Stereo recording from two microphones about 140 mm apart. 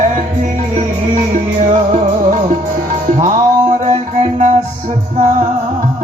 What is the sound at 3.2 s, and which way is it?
Music, 60° right (ahead or behind).